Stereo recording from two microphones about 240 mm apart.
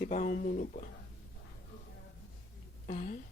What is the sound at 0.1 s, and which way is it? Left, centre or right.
Speech, left.